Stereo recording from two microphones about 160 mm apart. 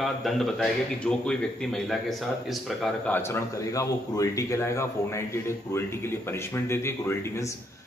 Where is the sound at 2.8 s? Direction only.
15° left (ahead or behind).